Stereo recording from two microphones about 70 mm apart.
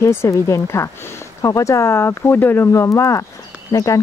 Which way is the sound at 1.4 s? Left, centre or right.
Left.